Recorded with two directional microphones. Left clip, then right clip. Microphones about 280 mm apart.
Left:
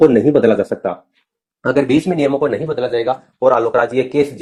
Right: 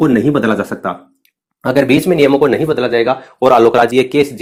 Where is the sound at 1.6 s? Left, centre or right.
Right.